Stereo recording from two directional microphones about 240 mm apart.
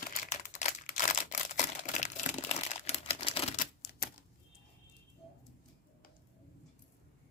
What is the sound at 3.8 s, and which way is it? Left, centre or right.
Typewriter, left.